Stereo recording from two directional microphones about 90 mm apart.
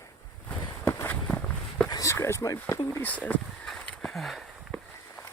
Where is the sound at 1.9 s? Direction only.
40° left (ahead or behind).